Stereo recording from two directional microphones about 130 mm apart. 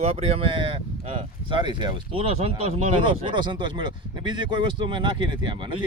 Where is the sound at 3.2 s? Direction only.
35° right (ahead or behind).